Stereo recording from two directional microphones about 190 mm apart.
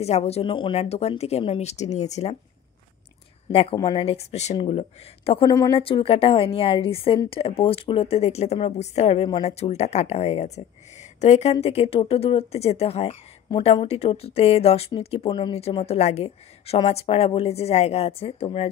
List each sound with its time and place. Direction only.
0.0 s speech: 35° left (ahead or behind)
3.7 s speech: 25° left (ahead or behind)
5.5 s a woman's voice: 20° left (ahead or behind)